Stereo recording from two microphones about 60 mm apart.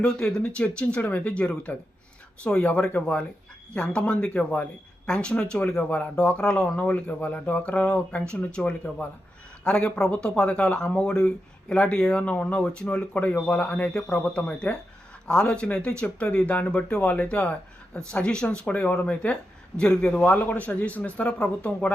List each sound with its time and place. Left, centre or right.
0.0 s speech: centre
6.7 s speech: left